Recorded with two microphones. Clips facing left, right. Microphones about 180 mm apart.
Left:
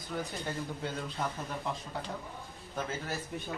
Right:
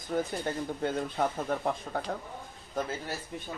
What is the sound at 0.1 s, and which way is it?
Speech, 45° right (ahead or behind).